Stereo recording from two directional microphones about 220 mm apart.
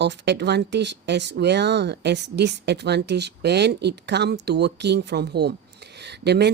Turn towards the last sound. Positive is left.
turn(degrees=-50)  # may be behind; listen again after turning